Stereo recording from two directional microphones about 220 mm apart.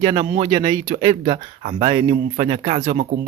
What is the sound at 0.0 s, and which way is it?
Speech, 25° right (ahead or behind).